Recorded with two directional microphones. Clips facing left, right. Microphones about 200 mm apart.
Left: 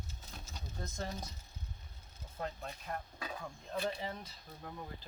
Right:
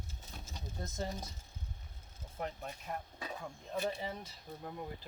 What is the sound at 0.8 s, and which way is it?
Speech, 15° right (ahead or behind).